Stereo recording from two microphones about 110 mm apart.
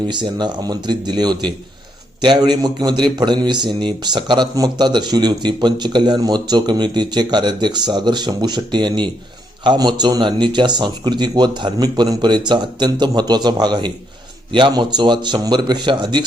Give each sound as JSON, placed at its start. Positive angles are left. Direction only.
{"t": 0.1, "sound": "a man's voice", "side_deg": -45}